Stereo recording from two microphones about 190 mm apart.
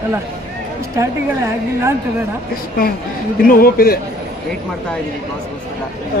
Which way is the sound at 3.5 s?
50° left (ahead or behind).